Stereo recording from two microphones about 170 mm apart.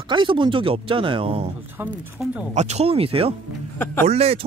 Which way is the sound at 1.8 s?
5° right (ahead or behind).